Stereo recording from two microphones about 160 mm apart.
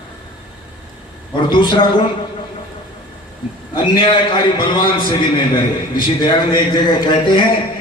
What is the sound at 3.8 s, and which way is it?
A man's voice, 30° left (ahead or behind).